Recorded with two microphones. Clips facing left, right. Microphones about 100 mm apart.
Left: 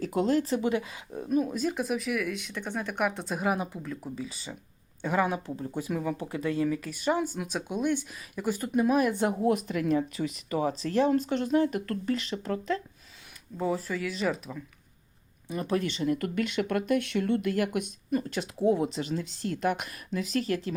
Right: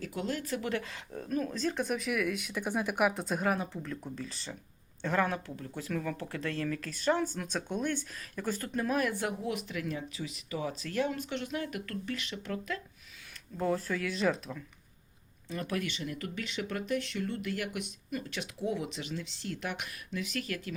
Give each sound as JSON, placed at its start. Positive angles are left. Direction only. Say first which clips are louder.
{"t": 0.0, "sound": "speech", "louder": "left 10 dB", "side_deg": 35}
{"t": 9.4, "sound": "speech", "louder": "left 9 dB", "side_deg": 40}
{"t": 13.6, "sound": "speech", "louder": "left 2 dB", "side_deg": 5}
{"t": 15.4, "sound": "speech", "louder": "left 6 dB", "side_deg": 20}
{"t": 17.5, "sound": "speech", "louder": "left 8 dB", "side_deg": 45}